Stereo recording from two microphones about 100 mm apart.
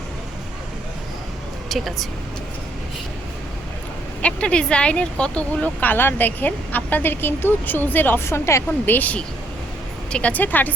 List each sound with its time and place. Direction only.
1.7 s speech: centre (ahead or behind)
4.2 s speech: 10° left (ahead or behind); by 9.0 s 30° left (ahead or behind)
9.0 s speech: 15° left (ahead or behind)